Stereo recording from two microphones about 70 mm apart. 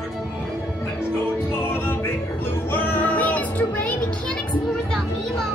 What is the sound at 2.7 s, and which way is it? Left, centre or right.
Music, left.